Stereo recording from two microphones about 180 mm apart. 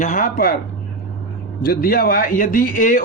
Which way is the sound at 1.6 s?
55° left (ahead or behind).